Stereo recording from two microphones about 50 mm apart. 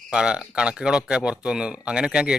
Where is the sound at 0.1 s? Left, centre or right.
Centre.